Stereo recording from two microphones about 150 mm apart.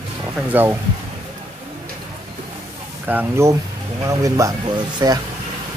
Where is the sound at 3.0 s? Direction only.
15° right (ahead or behind).